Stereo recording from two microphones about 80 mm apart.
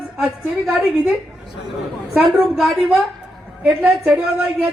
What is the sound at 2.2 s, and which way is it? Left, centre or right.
Speech, centre.